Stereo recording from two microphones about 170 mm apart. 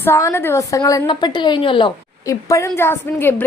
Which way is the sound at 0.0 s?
15° left (ahead or behind).